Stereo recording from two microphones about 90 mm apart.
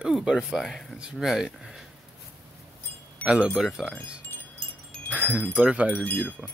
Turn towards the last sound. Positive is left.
turn(degrees=15)  # may be behind; listen again after turning